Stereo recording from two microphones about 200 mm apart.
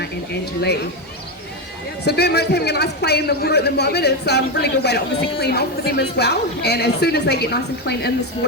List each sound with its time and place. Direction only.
2.0 s a man's voice: 55° left (ahead or behind)